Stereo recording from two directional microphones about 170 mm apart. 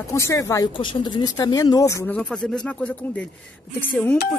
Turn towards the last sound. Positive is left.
turn(degrees=10)  # may be behind; listen again after turning